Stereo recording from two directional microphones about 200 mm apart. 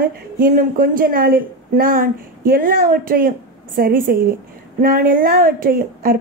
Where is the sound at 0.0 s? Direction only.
45° right (ahead or behind).